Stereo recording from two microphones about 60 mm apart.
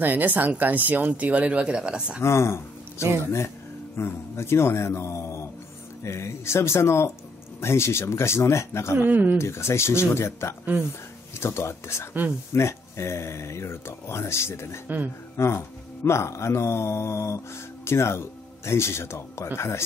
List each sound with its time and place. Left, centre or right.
0.0 s speech: right; by 2.2 s centre
2.2 s speech: left
8.9 s speech: right
9.4 s speech: left